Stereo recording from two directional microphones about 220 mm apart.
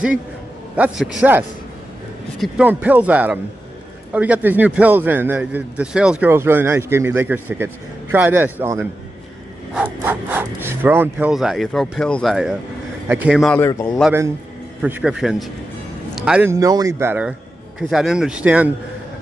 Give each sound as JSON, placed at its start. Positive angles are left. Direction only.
{"t": 0.7, "sound": "a man's voice", "side_deg": -5}
{"t": 2.4, "sound": "a man's voice", "side_deg": -5}
{"t": 13.6, "sound": "a man's voice", "side_deg": 15}
{"t": 14.8, "sound": "a man's voice", "side_deg": -5}